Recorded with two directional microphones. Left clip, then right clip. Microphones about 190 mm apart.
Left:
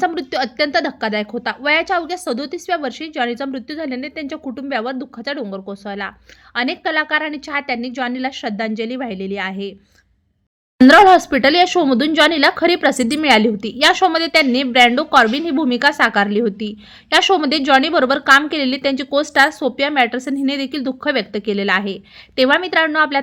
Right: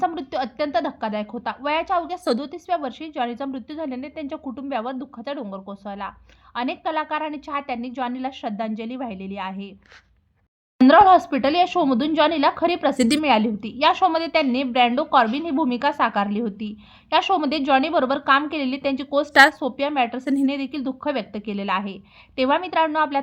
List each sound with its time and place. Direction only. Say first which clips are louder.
0.0 s a woman's voice: left 5 dB; 20° left (ahead or behind)
10.8 s a woman's voice: left 5 dB; 30° left (ahead or behind)
13.0 s a woman's voice: left 1 dB; centre (ahead or behind)
13.2 s a woman's voice: left 6 dB; 25° left (ahead or behind)
19.3 s a woman's voice: right 1 dB; centre (ahead or behind)
19.5 s a woman's voice: left 6 dB; 25° left (ahead or behind)
20.2 s a woman's voice: left 1 dB; centre (ahead or behind)
20.5 s a woman's voice: left 5 dB; 25° left (ahead or behind)